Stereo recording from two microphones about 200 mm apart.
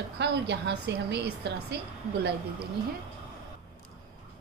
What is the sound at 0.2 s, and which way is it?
A woman's voice, 60° right (ahead or behind).